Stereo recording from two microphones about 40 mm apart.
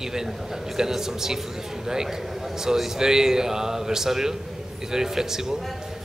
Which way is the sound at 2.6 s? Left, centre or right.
Centre.